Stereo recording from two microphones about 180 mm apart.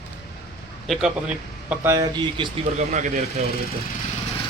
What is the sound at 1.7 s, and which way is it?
Speech, 10° right (ahead or behind).